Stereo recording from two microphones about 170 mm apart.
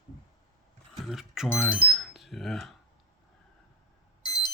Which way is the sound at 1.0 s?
Centre (ahead or behind).